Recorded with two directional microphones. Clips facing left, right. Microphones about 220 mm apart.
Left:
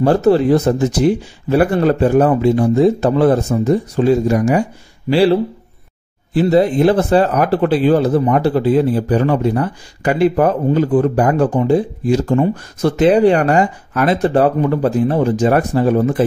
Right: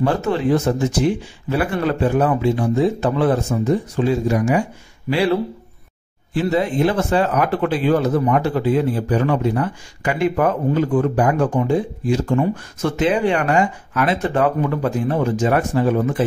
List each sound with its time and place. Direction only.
0.0 s speech: 40° left (ahead or behind)